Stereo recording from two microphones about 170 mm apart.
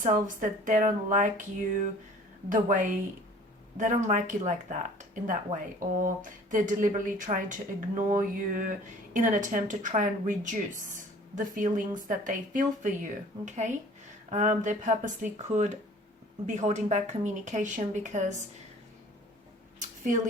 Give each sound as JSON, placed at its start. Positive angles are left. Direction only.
{"t": 0.0, "sound": "speech", "side_deg": -50}
{"t": 2.5, "sound": "speech", "side_deg": -50}